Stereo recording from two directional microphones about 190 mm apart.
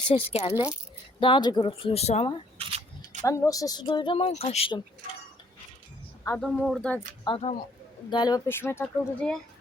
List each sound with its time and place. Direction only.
0.1 s a woman's voice: 30° left (ahead or behind)
2.6 s a sound: 30° right (ahead or behind)
3.2 s a woman's voice: 15° left (ahead or behind); by 4.8 s 30° left (ahead or behind)
6.2 s speech: 5° left (ahead or behind)
7.3 s a woman's voice: 20° left (ahead or behind); by 9.4 s 5° left (ahead or behind)